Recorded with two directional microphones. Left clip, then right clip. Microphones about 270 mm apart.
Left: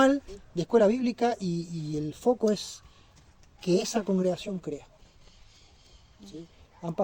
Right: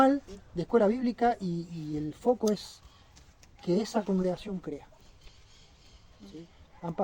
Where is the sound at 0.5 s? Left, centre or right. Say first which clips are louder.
Left 3 dB; left.